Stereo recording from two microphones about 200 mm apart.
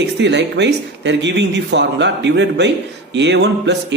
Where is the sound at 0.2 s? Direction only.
60° right (ahead or behind).